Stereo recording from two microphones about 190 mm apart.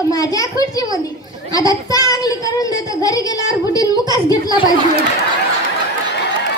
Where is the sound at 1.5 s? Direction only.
20° left (ahead or behind).